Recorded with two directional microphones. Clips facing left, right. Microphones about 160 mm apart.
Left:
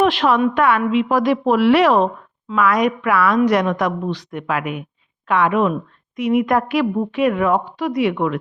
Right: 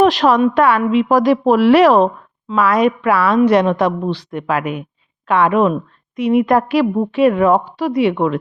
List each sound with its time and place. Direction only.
0.0 s a woman's voice: 40° right (ahead or behind)